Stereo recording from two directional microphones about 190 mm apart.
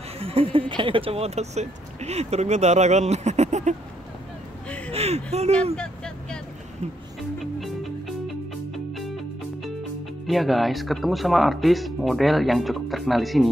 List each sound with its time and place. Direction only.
0.2 s speech: 30° right (ahead or behind)
4.6 s a sound: 5° left (ahead or behind)
4.9 s speech: 35° right (ahead or behind)
5.8 s vehicle: 5° left (ahead or behind)
10.2 s speech: centre (ahead or behind)